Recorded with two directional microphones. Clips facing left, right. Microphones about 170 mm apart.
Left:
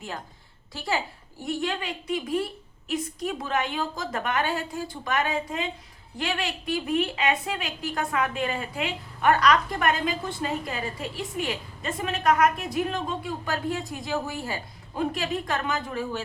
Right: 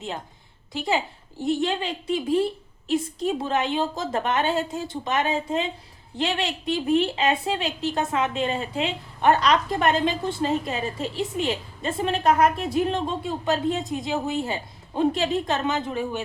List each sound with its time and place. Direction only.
0.7 s a woman's voice: 20° right (ahead or behind)